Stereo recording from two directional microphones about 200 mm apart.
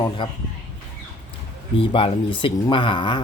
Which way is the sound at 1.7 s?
25° left (ahead or behind).